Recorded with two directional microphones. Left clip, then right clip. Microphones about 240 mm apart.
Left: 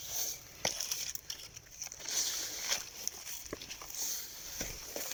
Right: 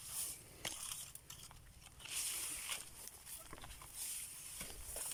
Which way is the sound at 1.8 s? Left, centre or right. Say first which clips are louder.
Left 10 dB; left.